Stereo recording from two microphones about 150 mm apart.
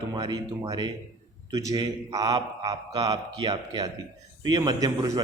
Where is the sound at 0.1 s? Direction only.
30° right (ahead or behind).